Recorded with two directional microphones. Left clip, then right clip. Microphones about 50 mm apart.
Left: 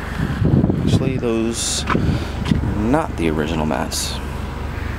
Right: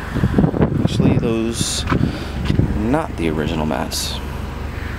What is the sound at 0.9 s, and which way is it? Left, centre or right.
Speech, centre.